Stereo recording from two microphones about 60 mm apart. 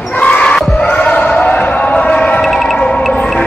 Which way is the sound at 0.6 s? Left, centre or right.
Centre.